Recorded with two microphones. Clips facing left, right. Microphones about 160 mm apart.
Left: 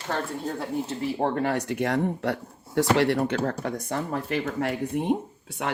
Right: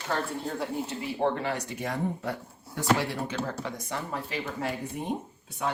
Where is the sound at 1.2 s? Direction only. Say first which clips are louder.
Left 2 dB; 50° left (ahead or behind).